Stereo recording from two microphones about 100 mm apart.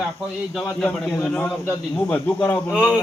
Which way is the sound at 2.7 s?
10° right (ahead or behind).